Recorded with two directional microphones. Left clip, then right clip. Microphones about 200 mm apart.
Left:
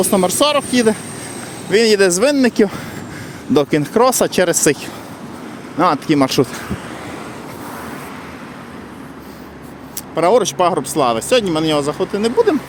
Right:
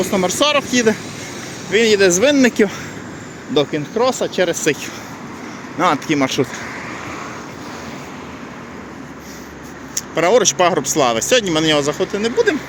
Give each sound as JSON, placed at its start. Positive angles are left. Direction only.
{"t": 0.0, "sound": "speech", "side_deg": 25}
{"t": 1.7, "sound": "speech", "side_deg": 35}
{"t": 2.4, "sound": "speech", "side_deg": 20}
{"t": 3.5, "sound": "speech", "side_deg": 45}
{"t": 5.7, "sound": "speech", "side_deg": 20}
{"t": 9.9, "sound": "speech", "side_deg": 10}